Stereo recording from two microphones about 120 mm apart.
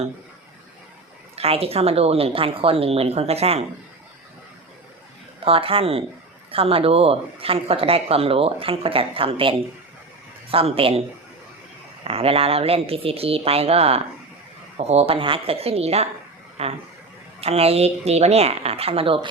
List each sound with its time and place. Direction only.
1.4 s a woman's voice: 55° right (ahead or behind)
5.5 s speech: 50° right (ahead or behind)
12.0 s a woman's voice: 55° right (ahead or behind)
16.6 s a sound: 60° right (ahead or behind)
17.4 s a woman's voice: 60° right (ahead or behind)